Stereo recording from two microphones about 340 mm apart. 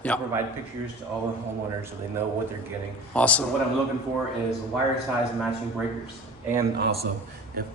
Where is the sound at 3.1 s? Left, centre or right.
Centre.